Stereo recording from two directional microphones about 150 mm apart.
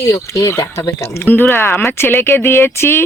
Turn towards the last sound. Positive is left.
turn(degrees=15)  # may be behind; listen again after turning